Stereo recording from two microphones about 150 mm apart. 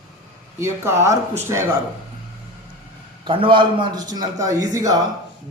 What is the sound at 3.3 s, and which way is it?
A man's voice, 35° right (ahead or behind).